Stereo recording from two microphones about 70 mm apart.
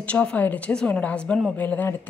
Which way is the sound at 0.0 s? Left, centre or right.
Centre.